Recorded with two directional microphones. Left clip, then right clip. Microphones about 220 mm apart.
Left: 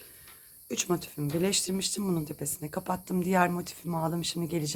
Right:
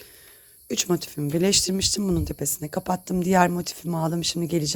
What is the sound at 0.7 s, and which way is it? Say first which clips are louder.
Speech: right 6 dB; 35° right (ahead or behind).